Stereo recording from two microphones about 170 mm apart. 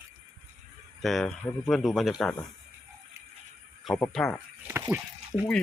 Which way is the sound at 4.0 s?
5° left (ahead or behind).